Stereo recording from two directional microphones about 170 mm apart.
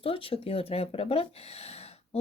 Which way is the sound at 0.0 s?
35° left (ahead or behind).